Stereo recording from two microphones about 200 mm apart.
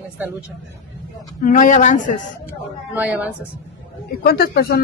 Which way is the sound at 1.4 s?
40° left (ahead or behind).